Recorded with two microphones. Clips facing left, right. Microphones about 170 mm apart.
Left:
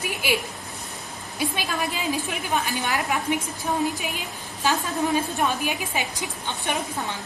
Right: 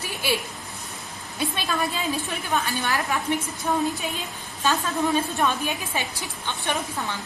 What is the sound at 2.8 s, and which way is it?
Speech, 15° left (ahead or behind).